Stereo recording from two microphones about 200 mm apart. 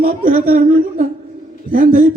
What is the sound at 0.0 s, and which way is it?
A man's voice, 50° right (ahead or behind).